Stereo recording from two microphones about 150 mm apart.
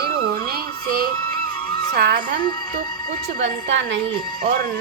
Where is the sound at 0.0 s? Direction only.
90° right.